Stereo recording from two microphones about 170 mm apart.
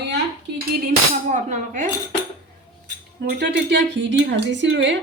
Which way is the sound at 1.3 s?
45° right (ahead or behind).